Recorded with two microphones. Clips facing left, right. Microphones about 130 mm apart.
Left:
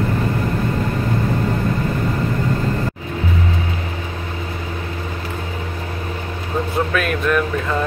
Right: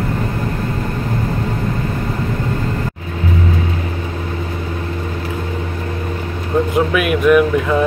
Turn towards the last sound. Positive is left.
turn(degrees=-10)  # may be behind; listen again after turning